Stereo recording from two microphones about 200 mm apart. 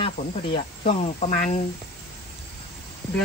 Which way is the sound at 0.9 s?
35° left (ahead or behind).